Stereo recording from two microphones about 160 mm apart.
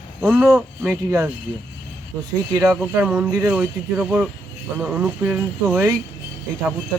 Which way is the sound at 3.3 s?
20° right (ahead or behind).